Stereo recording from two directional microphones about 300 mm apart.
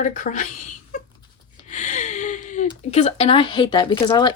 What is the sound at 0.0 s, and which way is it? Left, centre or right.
Speech, left.